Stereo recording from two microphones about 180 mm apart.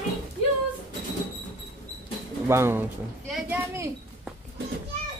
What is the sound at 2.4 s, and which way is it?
Speech, 15° right (ahead or behind).